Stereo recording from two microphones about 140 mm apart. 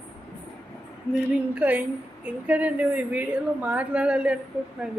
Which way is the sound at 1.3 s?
10° right (ahead or behind).